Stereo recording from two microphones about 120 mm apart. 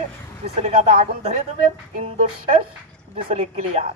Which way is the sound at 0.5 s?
60° right (ahead or behind).